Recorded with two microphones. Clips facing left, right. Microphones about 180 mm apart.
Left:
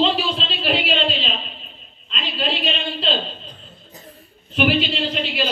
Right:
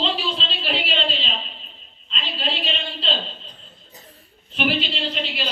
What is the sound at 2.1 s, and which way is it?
A woman's voice, 50° left (ahead or behind).